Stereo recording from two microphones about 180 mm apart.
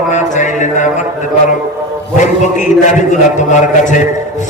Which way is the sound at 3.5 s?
45° left (ahead or behind).